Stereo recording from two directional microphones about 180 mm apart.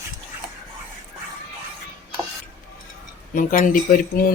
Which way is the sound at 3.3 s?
45° left (ahead or behind).